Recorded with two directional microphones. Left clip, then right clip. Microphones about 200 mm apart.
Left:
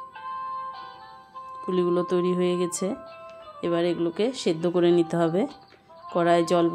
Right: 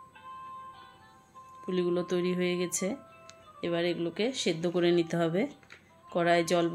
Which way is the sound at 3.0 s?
45° left (ahead or behind).